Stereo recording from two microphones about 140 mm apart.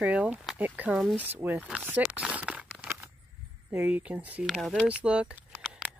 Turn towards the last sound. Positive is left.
turn(degrees=-5)  # may be behind; listen again after turning